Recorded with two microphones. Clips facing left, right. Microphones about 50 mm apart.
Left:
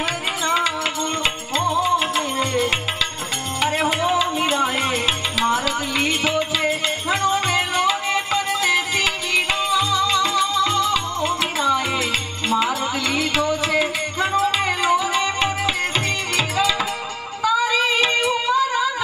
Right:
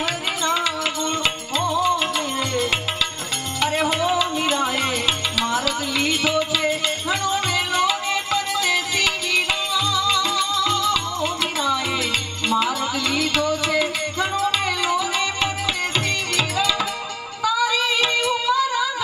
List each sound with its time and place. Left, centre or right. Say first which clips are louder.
1.5 s music: left 2 dB; centre
14.2 s music: left 3 dB; centre
14.6 s music: left 3 dB; left
18.5 s a sound: left 1 dB; left